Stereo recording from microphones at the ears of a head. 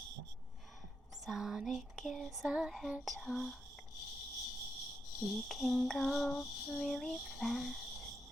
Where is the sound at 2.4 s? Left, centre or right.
Centre.